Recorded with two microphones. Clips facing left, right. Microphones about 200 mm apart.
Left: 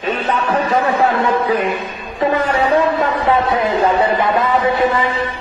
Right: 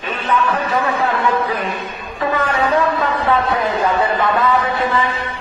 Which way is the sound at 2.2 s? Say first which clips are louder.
Left 3 dB; 25° left (ahead or behind).